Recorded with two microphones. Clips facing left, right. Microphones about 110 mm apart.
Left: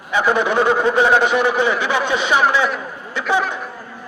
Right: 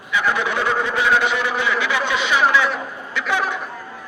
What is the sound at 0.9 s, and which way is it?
Speech, 40° left (ahead or behind).